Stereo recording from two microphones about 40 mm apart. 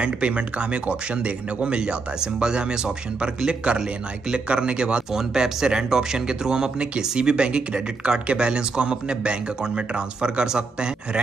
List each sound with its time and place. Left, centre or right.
0.0 s speech: right
5.1 s speech: centre